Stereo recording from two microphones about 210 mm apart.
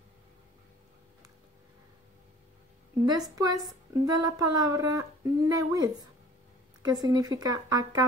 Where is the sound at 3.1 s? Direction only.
20° right (ahead or behind).